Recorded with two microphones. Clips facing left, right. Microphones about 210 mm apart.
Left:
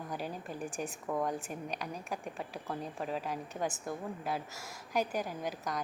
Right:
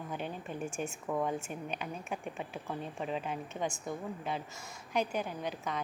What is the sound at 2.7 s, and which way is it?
A woman's voice, centre (ahead or behind).